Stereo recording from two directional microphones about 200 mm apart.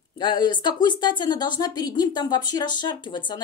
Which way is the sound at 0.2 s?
25° left (ahead or behind).